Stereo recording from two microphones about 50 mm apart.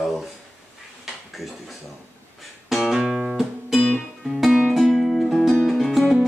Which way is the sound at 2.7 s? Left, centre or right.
Centre.